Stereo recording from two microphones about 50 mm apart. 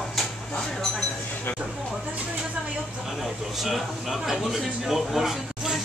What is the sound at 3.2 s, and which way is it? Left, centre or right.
Speech, centre.